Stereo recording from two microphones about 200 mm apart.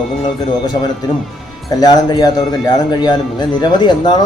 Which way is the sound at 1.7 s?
20° left (ahead or behind).